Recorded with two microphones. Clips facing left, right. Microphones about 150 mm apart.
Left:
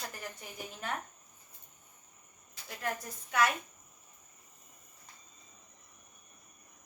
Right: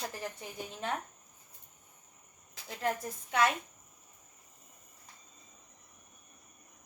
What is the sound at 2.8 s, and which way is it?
Speech, 25° right (ahead or behind).